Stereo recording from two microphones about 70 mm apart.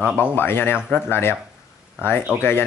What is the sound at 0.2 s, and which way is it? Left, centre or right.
Speech, left.